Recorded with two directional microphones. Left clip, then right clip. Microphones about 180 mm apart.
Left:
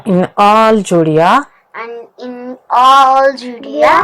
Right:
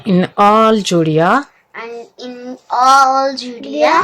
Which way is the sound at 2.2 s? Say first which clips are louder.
Left 3 dB; 20° left (ahead or behind).